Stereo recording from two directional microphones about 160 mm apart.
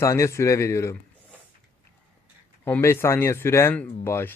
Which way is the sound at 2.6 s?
15° left (ahead or behind).